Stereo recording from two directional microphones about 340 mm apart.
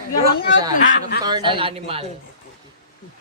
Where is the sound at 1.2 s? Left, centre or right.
Centre.